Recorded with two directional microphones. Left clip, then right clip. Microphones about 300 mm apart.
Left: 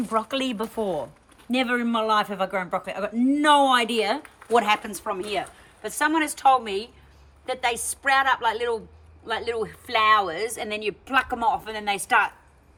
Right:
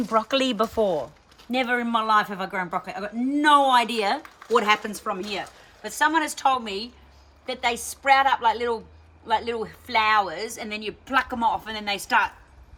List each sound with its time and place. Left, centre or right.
0.1 s speech: centre